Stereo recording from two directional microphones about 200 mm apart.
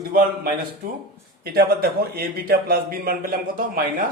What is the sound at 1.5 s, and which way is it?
A man's voice, 50° right (ahead or behind).